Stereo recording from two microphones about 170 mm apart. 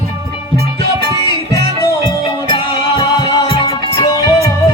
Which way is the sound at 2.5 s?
25° left (ahead or behind).